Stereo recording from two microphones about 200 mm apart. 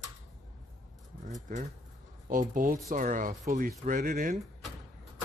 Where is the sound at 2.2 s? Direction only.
40° right (ahead or behind).